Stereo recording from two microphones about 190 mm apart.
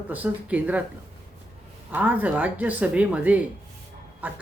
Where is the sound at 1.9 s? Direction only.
10° right (ahead or behind).